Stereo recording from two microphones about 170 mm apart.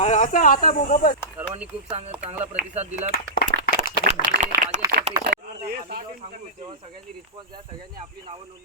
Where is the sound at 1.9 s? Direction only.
35° right (ahead or behind).